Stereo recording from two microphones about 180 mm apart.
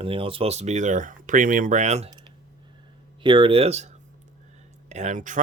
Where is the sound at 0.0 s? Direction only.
30° right (ahead or behind).